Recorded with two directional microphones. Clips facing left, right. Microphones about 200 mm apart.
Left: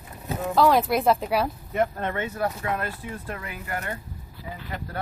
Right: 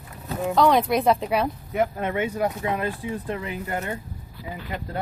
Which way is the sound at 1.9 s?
10° right (ahead or behind).